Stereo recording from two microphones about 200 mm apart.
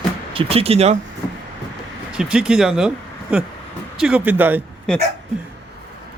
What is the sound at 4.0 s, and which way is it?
Speech, 5° right (ahead or behind).